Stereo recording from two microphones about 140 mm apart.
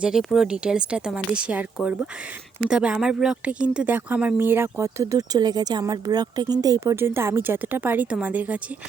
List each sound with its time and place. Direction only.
0.0 s speech: centre (ahead or behind)